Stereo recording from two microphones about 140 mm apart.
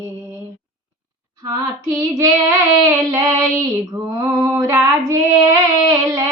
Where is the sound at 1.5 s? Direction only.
20° right (ahead or behind).